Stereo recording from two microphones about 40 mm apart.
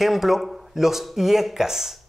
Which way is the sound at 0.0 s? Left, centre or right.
Centre.